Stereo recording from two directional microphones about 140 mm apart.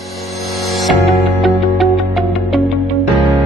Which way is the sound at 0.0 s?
Centre (ahead or behind).